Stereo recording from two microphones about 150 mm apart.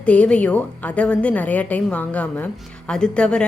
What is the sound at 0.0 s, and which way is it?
A woman's voice, 10° left (ahead or behind).